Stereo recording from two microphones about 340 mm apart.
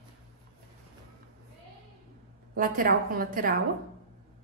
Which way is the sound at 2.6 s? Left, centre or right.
Right.